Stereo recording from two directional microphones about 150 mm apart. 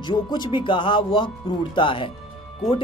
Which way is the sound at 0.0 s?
30° left (ahead or behind).